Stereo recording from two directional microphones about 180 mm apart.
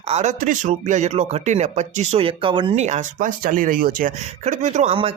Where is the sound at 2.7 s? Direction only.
40° right (ahead or behind).